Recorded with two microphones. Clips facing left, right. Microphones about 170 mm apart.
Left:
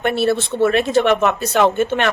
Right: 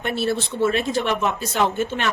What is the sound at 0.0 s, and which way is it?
Speech, 65° left (ahead or behind).